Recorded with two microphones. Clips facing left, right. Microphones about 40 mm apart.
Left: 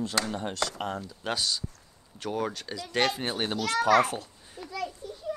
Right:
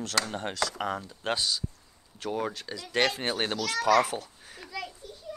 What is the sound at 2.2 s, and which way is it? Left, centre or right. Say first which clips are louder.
Speech: even; centre.